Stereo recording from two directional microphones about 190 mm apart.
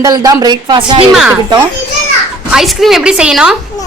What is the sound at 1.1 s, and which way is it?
Speech, 5° right (ahead or behind).